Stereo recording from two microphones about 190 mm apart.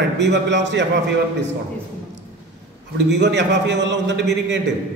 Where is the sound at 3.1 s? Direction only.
65° right (ahead or behind).